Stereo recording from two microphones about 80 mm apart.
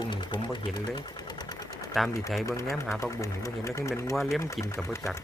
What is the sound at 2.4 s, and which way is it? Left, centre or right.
Speech, left.